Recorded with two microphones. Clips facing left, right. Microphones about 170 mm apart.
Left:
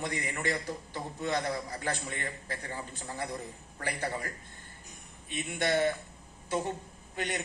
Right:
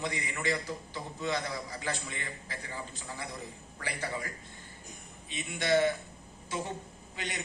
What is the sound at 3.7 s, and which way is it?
Speech, 50° left (ahead or behind).